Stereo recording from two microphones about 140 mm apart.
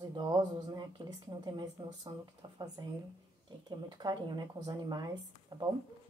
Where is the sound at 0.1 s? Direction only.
30° right (ahead or behind).